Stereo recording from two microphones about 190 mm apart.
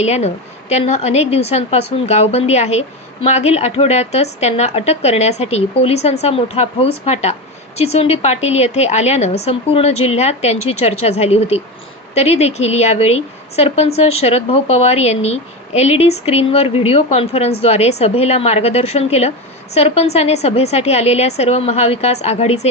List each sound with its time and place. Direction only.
0.0 s a woman's voice: 35° left (ahead or behind)